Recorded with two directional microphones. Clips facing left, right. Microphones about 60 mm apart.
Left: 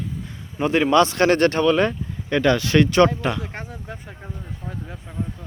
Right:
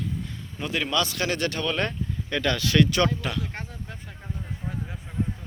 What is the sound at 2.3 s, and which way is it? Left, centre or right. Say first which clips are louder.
Speech: left 7 dB; left.